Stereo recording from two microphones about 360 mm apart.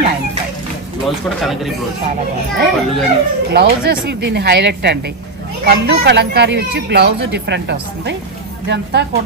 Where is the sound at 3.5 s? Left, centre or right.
Right.